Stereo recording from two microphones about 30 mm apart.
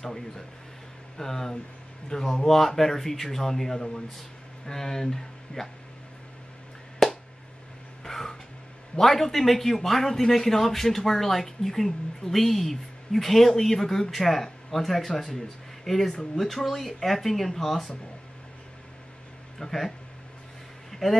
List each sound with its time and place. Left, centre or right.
1.1 s speech: centre
7.0 s a sound: centre
9.0 s speech: centre
19.6 s speech: centre
20.9 s speech: centre